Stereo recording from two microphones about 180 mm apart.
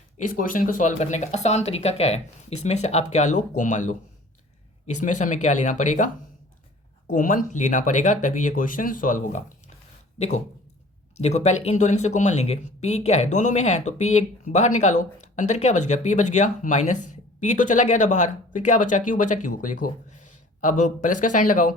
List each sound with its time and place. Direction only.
0.2 s speech: 50° left (ahead or behind)
7.1 s speech: 45° left (ahead or behind)